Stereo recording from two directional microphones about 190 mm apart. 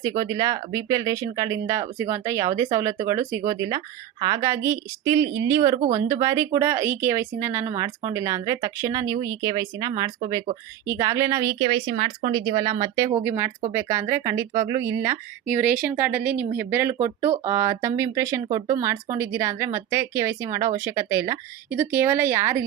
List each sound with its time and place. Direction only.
0.0 s speech: 20° right (ahead or behind)
13.2 s speech: 10° right (ahead or behind)